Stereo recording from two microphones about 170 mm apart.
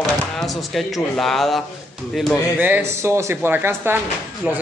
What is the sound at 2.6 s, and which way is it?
A man's voice, 10° right (ahead or behind).